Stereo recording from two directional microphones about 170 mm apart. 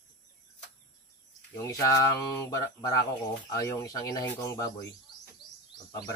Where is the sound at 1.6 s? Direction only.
20° left (ahead or behind).